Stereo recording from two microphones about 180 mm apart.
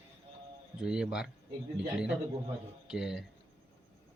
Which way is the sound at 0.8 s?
5° right (ahead or behind).